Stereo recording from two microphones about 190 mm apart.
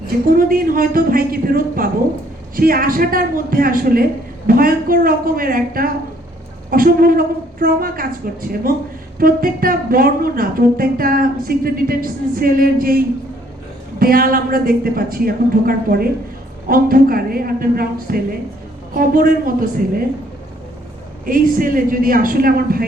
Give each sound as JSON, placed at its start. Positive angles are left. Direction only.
{"t": 0.3, "sound": "speech", "side_deg": -50}
{"t": 14.0, "sound": "speech", "side_deg": -50}
{"t": 21.2, "sound": "speech", "side_deg": -45}